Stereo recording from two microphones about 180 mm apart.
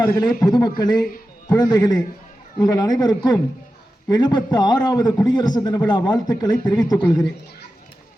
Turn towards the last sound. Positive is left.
turn(degrees=20)  # may be behind; listen again after turning